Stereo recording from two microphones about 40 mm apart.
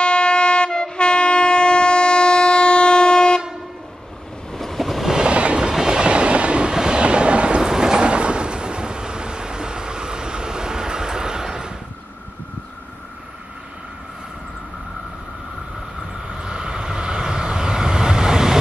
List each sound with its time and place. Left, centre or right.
0.0 s train: left
4.5 s waves: centre
5.0 s train: centre
5.3 s train: right
5.6 s train: centre
7.0 s thunder: right
16.3 s vehicle: centre